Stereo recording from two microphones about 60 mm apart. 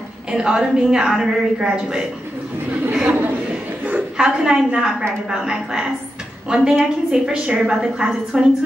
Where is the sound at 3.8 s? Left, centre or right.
Right.